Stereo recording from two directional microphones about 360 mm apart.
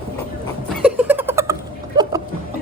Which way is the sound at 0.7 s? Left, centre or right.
Centre.